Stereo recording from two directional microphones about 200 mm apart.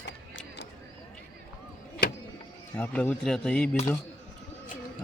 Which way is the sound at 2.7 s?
5° left (ahead or behind).